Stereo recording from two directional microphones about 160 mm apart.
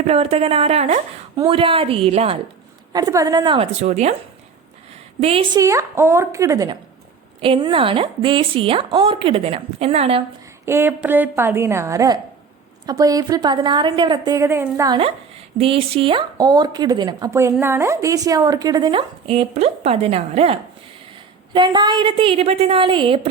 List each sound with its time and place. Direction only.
0.0 s a woman's voice: 40° right (ahead or behind)
2.9 s speech: 20° right (ahead or behind)
3.7 s speech: 45° right (ahead or behind)
5.2 s a woman's voice: 35° right (ahead or behind)
5.5 s speech: 20° right (ahead or behind)
7.4 s a woman's voice: 35° right (ahead or behind)
10.7 s a woman's voice: 15° right (ahead or behind)
14.8 s a woman's voice: 30° right (ahead or behind)
21.5 s a woman's voice: 30° right (ahead or behind)